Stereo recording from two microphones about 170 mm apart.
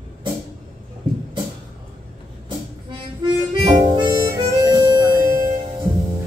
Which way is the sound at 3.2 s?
25° right (ahead or behind).